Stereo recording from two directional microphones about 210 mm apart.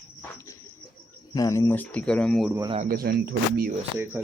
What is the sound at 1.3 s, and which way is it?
Speech, 15° left (ahead or behind).